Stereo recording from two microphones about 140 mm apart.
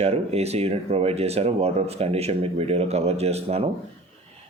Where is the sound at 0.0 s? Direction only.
50° right (ahead or behind).